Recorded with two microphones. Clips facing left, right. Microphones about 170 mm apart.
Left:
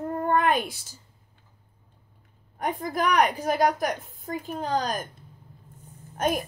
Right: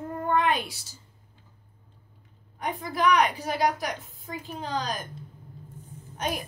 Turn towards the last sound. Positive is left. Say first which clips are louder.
# left 5 dB
turn(degrees=50)  # may be behind; listen again after turning